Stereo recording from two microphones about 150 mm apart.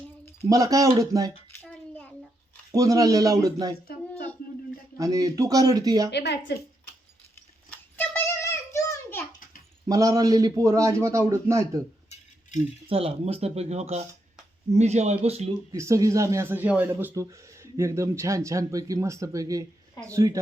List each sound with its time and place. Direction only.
0.4 s speech: 25° right (ahead or behind)
1.9 s a sound: 10° left (ahead or behind)
2.7 s speech: 20° right (ahead or behind)
4.9 s speech: 20° right (ahead or behind)
7.9 s a sound: 15° left (ahead or behind)
9.9 s speech: 25° right (ahead or behind)
12.9 s speech: 40° right (ahead or behind)
15.7 s speech: 20° right (ahead or behind)